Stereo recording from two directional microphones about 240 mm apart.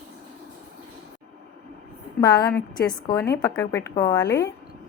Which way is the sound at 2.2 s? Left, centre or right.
Centre.